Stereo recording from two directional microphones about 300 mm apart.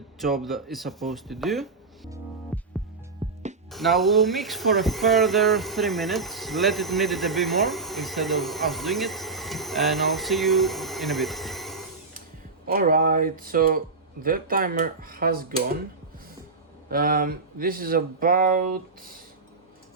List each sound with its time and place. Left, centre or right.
0.2 s speech: centre
2.5 s music: centre
3.2 s music: centre
3.7 s speech: centre
12.6 s speech: right
16.9 s speech: right